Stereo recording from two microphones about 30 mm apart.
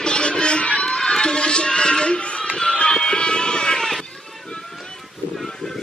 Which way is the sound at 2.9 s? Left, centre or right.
Left.